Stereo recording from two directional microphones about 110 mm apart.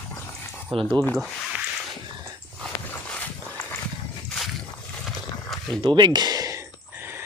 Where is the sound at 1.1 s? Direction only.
Centre (ahead or behind).